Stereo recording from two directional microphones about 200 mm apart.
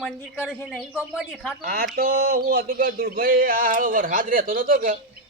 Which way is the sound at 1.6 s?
50° right (ahead or behind).